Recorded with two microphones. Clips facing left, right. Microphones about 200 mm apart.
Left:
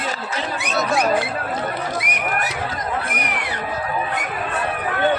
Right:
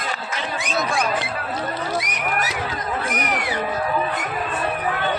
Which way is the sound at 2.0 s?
60° left (ahead or behind).